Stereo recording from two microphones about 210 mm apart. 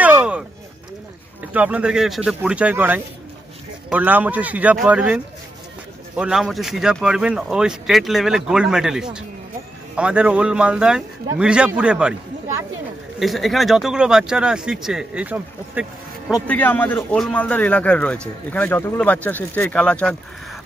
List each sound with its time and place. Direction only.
0.0 s a sound: 5° right (ahead or behind)
1.5 s a man's voice: 5° right (ahead or behind)
16.4 s a man's voice: 10° left (ahead or behind)